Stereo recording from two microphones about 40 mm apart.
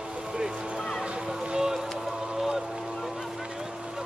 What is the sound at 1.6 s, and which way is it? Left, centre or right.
Boat, centre.